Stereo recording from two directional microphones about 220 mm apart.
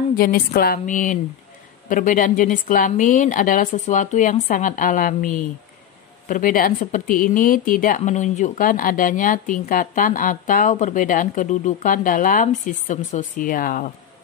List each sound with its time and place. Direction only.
0.1 s speech: 40° left (ahead or behind)